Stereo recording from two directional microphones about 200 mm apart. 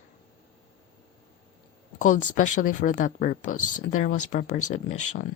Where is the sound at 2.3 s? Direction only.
40° left (ahead or behind).